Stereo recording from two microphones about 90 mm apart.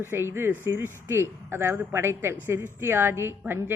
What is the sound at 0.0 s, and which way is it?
Speech, 25° right (ahead or behind).